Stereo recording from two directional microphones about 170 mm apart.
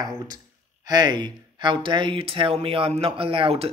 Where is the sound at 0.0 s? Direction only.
25° right (ahead or behind).